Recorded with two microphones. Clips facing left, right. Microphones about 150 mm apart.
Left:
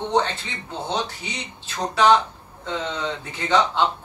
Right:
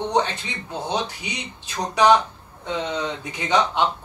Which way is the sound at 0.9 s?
15° right (ahead or behind).